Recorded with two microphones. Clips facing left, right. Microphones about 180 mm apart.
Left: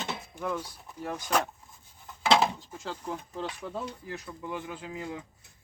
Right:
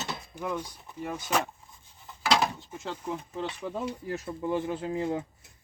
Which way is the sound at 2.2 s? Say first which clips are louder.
Left 2 dB; 25° left (ahead or behind).